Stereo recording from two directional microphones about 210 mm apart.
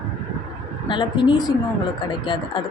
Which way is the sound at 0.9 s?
20° left (ahead or behind).